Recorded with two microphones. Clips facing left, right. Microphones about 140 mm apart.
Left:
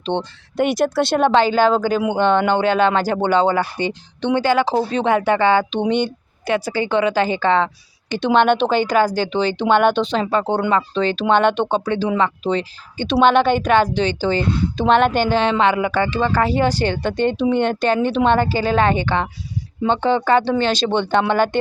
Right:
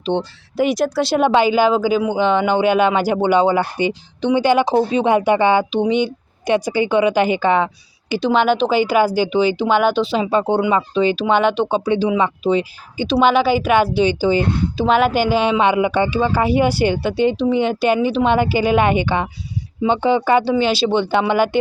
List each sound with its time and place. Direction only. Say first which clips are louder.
0.1 s speech: right 2 dB; 20° left (ahead or behind)
0.5 s speech: even; centre (ahead or behind)
5.8 s speech: right 2 dB; 5° right (ahead or behind)
6.4 s speech: right 3 dB; 15° right (ahead or behind)
8.1 s speech: even; centre (ahead or behind)